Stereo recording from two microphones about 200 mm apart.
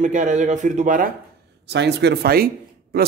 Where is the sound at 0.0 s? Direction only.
40° right (ahead or behind).